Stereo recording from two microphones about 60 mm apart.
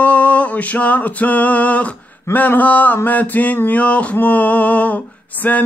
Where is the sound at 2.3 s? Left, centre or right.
Left.